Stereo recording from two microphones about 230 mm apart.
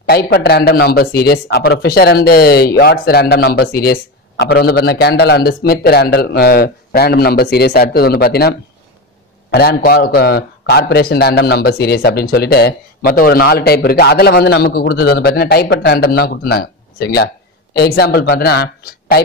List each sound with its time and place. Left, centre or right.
0.1 s a man's voice: left